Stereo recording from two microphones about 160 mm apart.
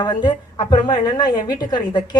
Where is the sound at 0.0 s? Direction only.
30° left (ahead or behind).